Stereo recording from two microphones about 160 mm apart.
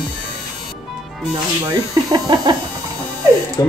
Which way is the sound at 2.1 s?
25° right (ahead or behind).